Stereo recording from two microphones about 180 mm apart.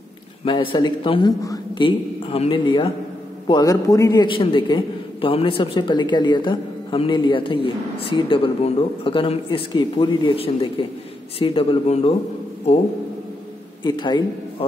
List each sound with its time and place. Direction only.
0.5 s a man's voice: 25° left (ahead or behind)
1.9 s a man's voice: 30° left (ahead or behind)
13.8 s a man's voice: 25° left (ahead or behind)